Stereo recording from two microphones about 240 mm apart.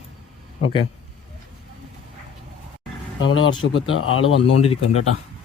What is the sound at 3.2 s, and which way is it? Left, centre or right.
Speech, left.